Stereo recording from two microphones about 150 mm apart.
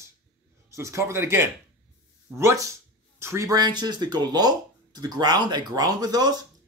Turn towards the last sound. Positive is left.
turn(degrees=-25)  # may be behind; listen again after turning